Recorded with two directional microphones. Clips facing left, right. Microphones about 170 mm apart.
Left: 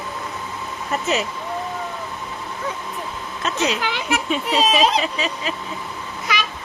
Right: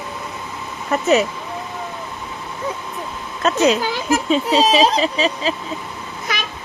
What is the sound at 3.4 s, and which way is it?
Speech, 40° right (ahead or behind).